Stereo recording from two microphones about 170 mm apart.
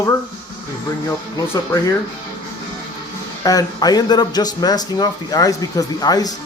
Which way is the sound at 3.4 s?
20° left (ahead or behind).